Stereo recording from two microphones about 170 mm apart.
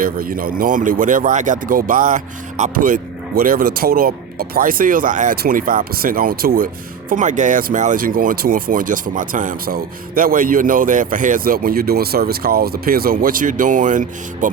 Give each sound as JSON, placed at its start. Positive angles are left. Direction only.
{"t": 0.0, "sound": "speech", "side_deg": -55}
{"t": 7.1, "sound": "speech", "side_deg": -45}